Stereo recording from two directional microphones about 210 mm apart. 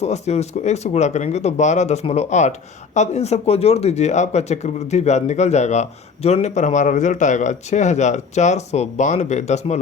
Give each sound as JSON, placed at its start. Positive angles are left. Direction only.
{"t": 0.0, "sound": "speech", "side_deg": 30}